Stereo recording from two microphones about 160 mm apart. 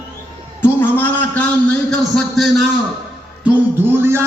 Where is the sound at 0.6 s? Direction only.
10° left (ahead or behind).